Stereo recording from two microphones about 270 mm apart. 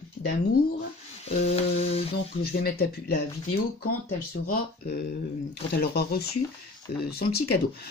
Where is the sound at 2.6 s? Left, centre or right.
Left.